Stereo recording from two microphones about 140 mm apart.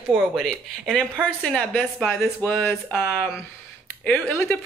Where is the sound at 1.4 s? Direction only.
5° left (ahead or behind).